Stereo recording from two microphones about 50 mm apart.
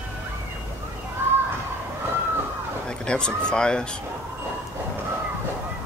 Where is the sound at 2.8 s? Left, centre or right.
Centre.